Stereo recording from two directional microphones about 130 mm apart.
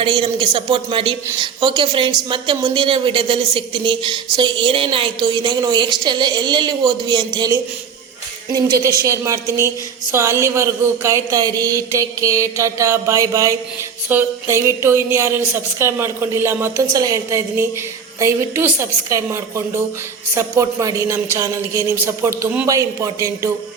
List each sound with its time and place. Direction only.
0.0 s speech: 40° right (ahead or behind)
8.5 s a woman's voice: 25° right (ahead or behind)